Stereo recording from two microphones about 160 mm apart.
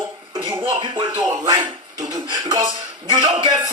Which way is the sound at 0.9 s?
25° right (ahead or behind).